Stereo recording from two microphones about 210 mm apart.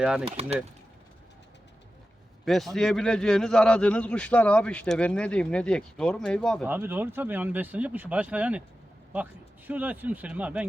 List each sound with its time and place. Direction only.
0.0 s a man's voice: 5° right (ahead or behind)
2.4 s a man's voice: centre (ahead or behind)
6.7 s speech: 10° right (ahead or behind)
9.6 s speech: 10° right (ahead or behind)